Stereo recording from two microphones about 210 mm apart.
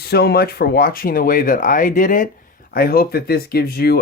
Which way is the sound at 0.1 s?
50° left (ahead or behind).